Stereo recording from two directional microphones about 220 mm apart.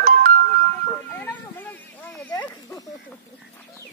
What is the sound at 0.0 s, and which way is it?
Music, 35° right (ahead or behind).